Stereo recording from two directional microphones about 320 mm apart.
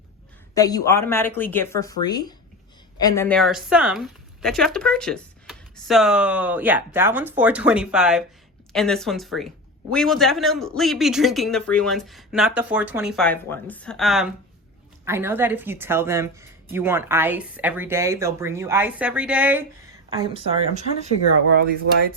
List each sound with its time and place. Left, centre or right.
0.5 s a woman's voice: centre
20.1 s a woman's voice: centre